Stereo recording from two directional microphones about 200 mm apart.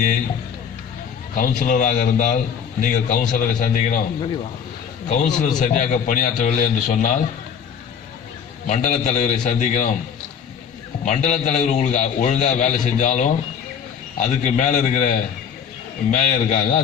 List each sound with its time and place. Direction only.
1.4 s a man's voice: 40° left (ahead or behind)
5.0 s a man's voice: 35° left (ahead or behind)
8.6 s a man's voice: 35° left (ahead or behind)
11.0 s a man's voice: 35° left (ahead or behind)